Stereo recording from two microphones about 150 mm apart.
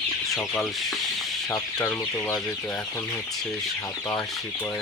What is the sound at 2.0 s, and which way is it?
Chicken, 20° left (ahead or behind).